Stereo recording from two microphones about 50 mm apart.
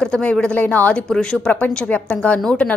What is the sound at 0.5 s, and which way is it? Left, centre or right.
Speech, left.